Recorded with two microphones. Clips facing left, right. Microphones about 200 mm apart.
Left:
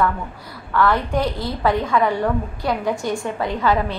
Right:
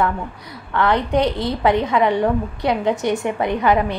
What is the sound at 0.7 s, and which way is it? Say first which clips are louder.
A woman's voice: right 1 dB; 20° right (ahead or behind).